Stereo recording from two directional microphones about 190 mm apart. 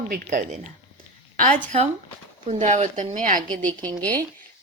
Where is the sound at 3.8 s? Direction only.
20° right (ahead or behind).